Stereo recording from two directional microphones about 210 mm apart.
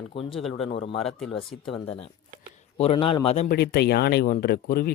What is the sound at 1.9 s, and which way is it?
Speech, 30° left (ahead or behind).